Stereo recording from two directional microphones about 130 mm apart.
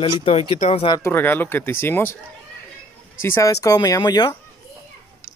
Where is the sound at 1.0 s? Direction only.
15° left (ahead or behind).